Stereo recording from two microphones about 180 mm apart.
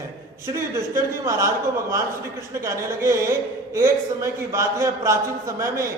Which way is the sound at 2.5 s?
15° right (ahead or behind).